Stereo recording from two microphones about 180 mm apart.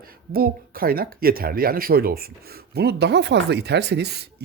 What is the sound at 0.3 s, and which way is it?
Speech, 55° right (ahead or behind).